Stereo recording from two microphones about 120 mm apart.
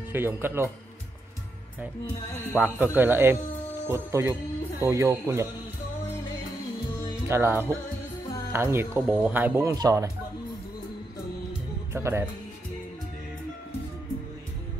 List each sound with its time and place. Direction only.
0.1 s speech: 20° right (ahead or behind)
2.6 s speech: 15° right (ahead or behind)
7.2 s speech: 20° right (ahead or behind)
11.9 s speech: 20° right (ahead or behind)